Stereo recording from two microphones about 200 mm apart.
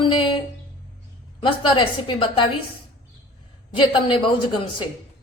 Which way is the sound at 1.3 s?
25° left (ahead or behind).